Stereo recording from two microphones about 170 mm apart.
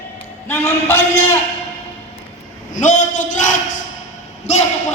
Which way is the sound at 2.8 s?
45° left (ahead or behind).